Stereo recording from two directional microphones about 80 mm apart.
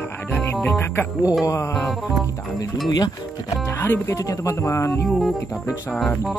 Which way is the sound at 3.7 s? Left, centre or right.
Left.